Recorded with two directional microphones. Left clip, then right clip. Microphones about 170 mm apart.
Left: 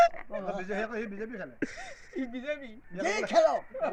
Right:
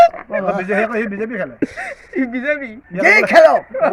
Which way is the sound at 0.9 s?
60° right (ahead or behind).